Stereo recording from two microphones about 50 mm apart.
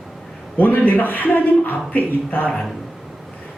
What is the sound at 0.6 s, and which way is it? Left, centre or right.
A man's voice, left.